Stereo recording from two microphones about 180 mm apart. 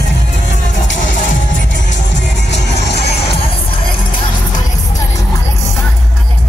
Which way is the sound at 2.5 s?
70° left (ahead or behind).